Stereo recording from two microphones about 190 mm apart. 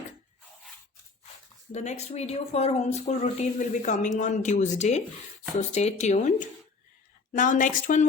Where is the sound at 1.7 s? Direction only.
35° left (ahead or behind).